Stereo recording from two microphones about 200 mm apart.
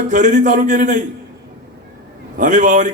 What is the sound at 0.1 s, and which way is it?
Speech, 40° right (ahead or behind).